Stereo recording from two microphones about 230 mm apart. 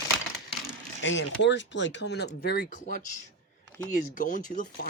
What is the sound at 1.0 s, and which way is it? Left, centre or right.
Speech, left.